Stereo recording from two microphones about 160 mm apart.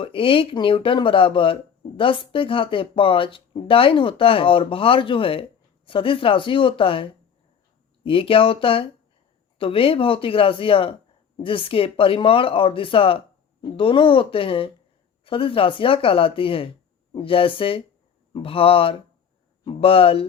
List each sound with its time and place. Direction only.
0.0 s speech: 35° left (ahead or behind)